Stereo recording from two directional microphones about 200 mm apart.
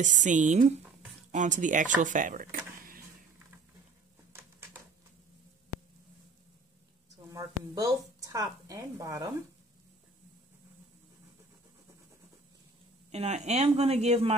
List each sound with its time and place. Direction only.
0.0 s speech: 40° right (ahead or behind)
4.3 s a sound: 15° right (ahead or behind)
7.3 s a woman's voice: 20° right (ahead or behind)
13.1 s speech: 35° right (ahead or behind)